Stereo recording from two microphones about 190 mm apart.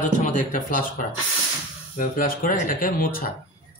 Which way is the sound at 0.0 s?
40° left (ahead or behind).